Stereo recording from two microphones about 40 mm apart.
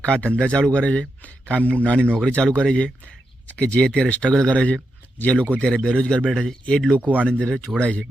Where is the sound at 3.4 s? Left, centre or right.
Left.